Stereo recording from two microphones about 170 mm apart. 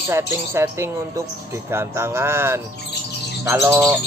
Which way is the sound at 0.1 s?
15° right (ahead or behind).